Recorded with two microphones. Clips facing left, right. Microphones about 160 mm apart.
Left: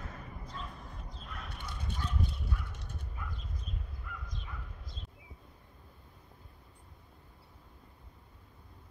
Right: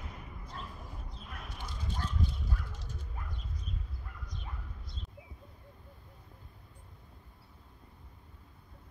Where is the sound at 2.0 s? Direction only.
65° left (ahead or behind).